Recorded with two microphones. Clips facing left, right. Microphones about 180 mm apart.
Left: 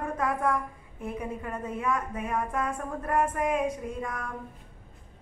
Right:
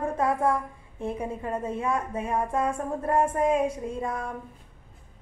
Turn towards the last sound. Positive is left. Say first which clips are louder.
# right 4 dB
turn(degrees=-25)  # may be behind; listen again after turning